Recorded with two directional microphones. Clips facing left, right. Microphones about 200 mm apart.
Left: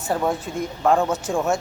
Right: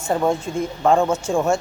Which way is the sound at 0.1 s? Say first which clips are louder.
Right 3 dB; 5° left (ahead or behind).